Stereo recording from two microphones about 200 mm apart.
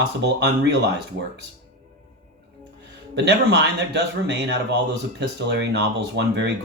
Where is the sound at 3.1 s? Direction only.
60° right (ahead or behind).